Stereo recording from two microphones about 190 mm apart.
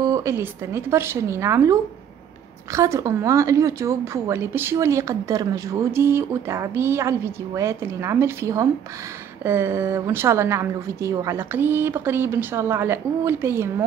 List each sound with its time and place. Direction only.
0.0 s a woman's voice: 15° right (ahead or behind)